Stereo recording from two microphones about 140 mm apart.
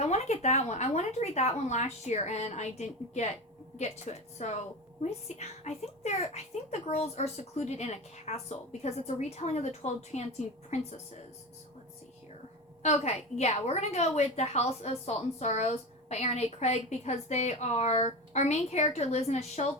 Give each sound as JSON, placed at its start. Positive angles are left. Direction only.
{"t": 0.0, "sound": "a woman's voice", "side_deg": 55}
{"t": 12.8, "sound": "a woman's voice", "side_deg": 50}